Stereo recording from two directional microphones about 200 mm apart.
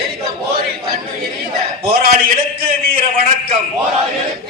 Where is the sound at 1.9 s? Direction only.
50° right (ahead or behind).